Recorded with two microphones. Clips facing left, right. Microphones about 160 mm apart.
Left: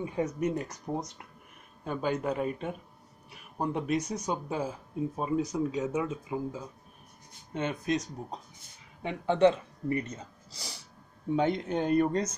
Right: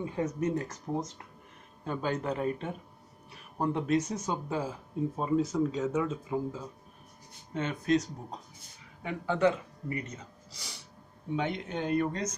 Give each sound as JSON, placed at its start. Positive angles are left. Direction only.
{"t": 0.0, "sound": "speech", "side_deg": 15}
{"t": 9.0, "sound": "speech", "side_deg": 25}
{"t": 10.5, "sound": "snort", "side_deg": 35}
{"t": 11.3, "sound": "speech", "side_deg": 40}